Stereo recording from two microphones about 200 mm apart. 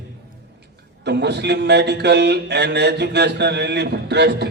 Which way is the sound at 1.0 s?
55° right (ahead or behind).